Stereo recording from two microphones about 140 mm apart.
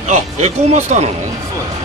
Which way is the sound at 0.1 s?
55° right (ahead or behind).